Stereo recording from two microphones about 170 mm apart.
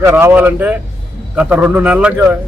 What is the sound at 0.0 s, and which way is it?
Speech, 15° right (ahead or behind).